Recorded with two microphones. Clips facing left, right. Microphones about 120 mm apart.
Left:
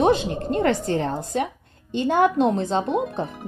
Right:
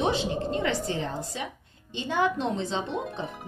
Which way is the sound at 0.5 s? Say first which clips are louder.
Left 11 dB; 55° left (ahead or behind).